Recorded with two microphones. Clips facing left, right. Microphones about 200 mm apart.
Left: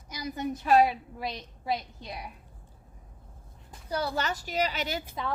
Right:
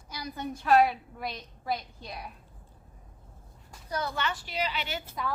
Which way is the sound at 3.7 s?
30° left (ahead or behind).